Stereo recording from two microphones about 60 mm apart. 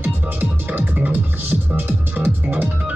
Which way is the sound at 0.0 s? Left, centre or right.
Right.